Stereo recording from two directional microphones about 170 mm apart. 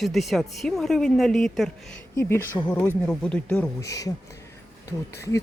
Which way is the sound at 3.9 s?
20° left (ahead or behind).